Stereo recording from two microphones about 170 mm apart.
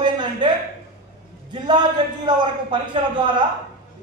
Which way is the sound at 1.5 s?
25° right (ahead or behind).